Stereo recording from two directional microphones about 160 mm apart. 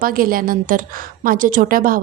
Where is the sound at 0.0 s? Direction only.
65° right (ahead or behind).